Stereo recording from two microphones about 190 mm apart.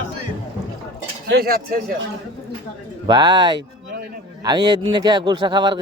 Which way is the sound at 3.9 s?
55° right (ahead or behind).